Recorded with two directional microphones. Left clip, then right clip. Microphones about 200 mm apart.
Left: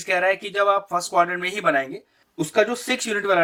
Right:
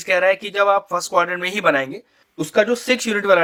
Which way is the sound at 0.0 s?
35° right (ahead or behind).